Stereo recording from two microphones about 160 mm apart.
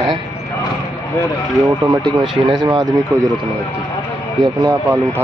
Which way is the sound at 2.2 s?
5° right (ahead or behind).